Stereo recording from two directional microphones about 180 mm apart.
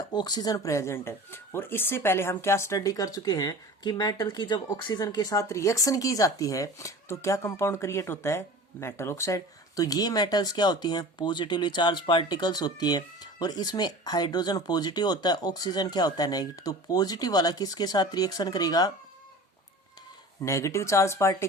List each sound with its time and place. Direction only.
0.1 s speech: 25° left (ahead or behind)
20.4 s speech: 15° left (ahead or behind)